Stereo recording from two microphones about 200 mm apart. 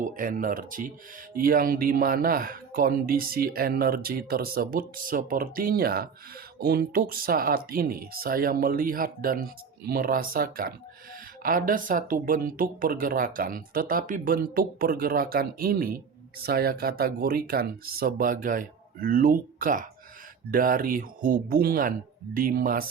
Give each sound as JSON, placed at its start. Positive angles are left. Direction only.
{"t": 0.0, "sound": "speech", "side_deg": -45}